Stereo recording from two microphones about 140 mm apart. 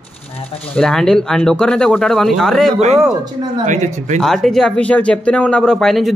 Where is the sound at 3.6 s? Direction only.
60° right (ahead or behind).